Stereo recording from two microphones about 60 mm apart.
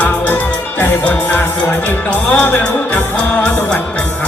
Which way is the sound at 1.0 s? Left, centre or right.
Left.